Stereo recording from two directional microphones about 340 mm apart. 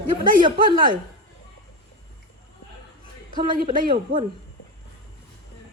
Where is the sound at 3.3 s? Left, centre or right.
Right.